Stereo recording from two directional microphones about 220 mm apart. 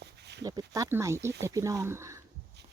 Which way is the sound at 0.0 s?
50° right (ahead or behind).